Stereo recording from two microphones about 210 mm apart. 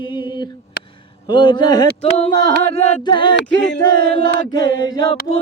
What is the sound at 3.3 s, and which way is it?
A capella, 55° left (ahead or behind).